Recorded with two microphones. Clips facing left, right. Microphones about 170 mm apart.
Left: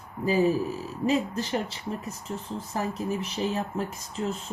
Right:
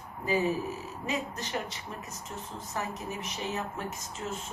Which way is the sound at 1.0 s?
30° left (ahead or behind).